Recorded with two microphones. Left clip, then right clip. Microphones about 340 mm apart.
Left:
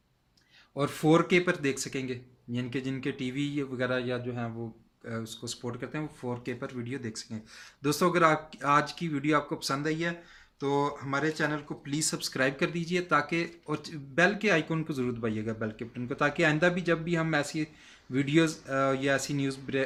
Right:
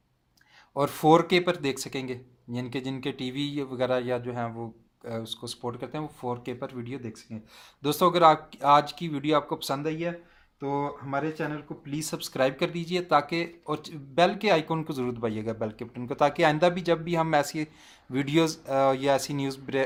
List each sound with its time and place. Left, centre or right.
0.8 s speech: centre